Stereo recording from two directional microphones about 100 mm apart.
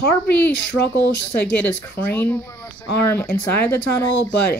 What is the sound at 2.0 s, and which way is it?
Speech, 20° left (ahead or behind).